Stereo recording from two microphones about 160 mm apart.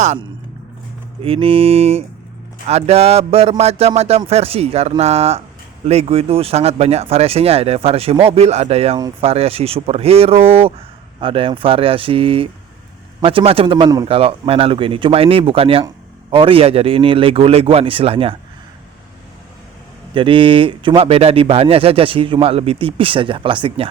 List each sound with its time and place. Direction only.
1.2 s speech: 35° right (ahead or behind)
20.1 s speech: 30° right (ahead or behind)